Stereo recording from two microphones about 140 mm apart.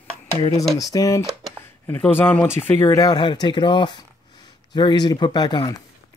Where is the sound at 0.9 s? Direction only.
20° left (ahead or behind).